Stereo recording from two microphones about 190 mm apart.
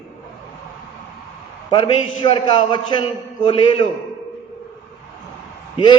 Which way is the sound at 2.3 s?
25° left (ahead or behind).